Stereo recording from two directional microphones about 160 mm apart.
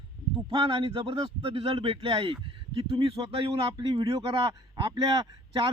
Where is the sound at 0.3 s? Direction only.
35° right (ahead or behind).